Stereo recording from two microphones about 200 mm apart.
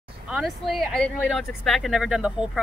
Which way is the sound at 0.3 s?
Centre (ahead or behind).